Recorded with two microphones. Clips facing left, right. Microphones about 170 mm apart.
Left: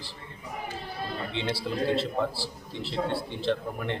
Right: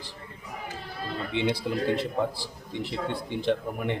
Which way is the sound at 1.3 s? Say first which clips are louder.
Right 5 dB; 15° right (ahead or behind).